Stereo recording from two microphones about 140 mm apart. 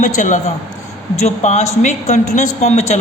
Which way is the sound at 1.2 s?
55° left (ahead or behind).